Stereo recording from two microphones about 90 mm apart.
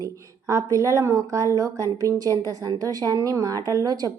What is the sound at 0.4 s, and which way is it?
A woman's voice, 35° right (ahead or behind).